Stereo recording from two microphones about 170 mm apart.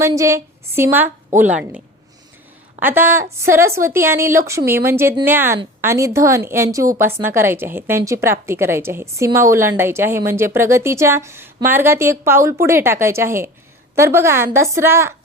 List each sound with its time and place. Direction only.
0.2 s a woman's voice: 15° right (ahead or behind)
2.8 s a woman's voice: 10° right (ahead or behind)